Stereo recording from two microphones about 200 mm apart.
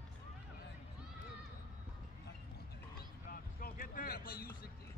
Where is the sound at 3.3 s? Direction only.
45° left (ahead or behind).